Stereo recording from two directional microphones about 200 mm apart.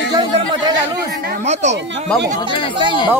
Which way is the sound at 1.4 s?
35° right (ahead or behind).